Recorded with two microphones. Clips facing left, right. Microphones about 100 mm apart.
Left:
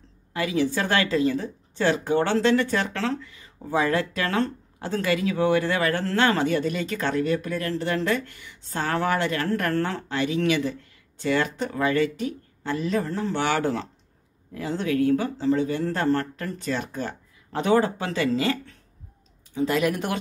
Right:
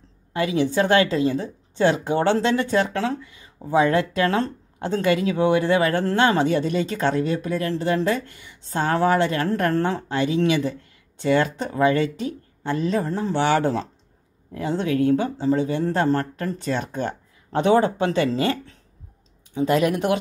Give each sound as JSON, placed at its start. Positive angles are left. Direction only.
{"t": 0.3, "sound": "speech", "side_deg": -25}